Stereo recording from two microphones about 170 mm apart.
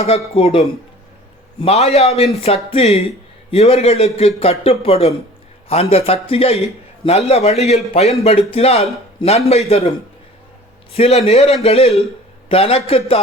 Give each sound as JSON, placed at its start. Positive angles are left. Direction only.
{"t": 0.3, "sound": "a man's voice", "side_deg": 35}
{"t": 1.6, "sound": "a man's voice", "side_deg": 40}
{"t": 10.9, "sound": "a man's voice", "side_deg": 35}